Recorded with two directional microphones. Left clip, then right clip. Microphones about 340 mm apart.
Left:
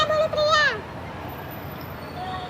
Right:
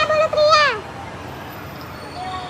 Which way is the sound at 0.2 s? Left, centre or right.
Centre.